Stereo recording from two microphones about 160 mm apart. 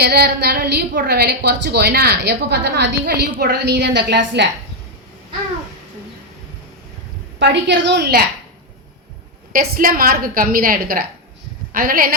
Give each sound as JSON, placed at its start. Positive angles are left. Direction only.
{"t": 0.0, "sound": "a woman's voice", "side_deg": -85}
{"t": 7.3, "sound": "a woman's voice", "side_deg": -90}
{"t": 9.5, "sound": "a woman's voice", "side_deg": -65}